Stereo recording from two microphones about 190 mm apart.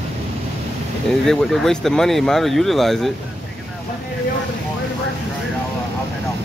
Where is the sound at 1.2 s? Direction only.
Centre (ahead or behind).